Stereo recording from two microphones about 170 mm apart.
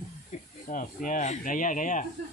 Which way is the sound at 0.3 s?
50° left (ahead or behind).